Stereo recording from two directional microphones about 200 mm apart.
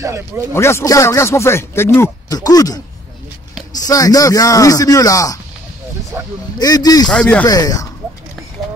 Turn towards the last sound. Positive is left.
turn(degrees=20)  # may be behind; listen again after turning